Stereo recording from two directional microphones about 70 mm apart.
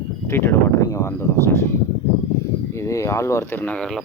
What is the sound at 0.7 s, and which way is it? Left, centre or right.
Speech, left.